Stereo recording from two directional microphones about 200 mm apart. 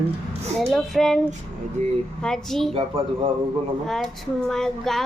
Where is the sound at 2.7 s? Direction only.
25° right (ahead or behind).